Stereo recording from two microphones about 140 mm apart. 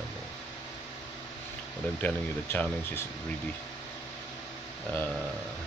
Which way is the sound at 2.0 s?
10° left (ahead or behind).